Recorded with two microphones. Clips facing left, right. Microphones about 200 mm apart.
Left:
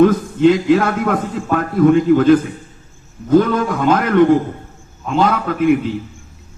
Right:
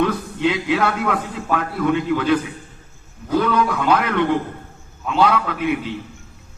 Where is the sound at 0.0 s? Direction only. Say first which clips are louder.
Left 9 dB; 45° left (ahead or behind).